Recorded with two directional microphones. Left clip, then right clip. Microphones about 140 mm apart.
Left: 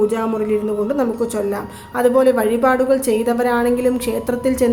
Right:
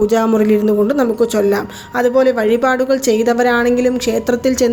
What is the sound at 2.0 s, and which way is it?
A woman's voice, 20° right (ahead or behind).